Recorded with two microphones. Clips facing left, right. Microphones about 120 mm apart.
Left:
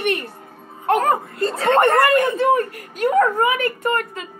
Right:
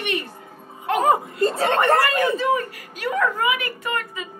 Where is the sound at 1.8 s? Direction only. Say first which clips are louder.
Left 4 dB; 55° left (ahead or behind).